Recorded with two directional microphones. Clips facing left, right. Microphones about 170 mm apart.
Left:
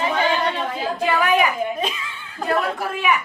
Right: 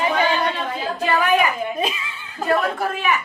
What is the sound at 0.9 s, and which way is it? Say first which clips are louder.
Speech: right 1 dB; 10° left (ahead or behind).